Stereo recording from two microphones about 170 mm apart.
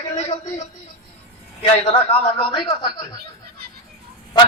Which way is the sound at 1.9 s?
30° left (ahead or behind).